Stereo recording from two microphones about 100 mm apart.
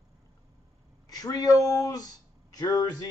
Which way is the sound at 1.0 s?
40° left (ahead or behind).